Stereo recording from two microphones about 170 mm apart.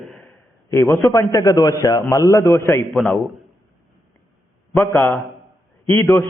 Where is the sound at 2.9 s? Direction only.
Centre (ahead or behind).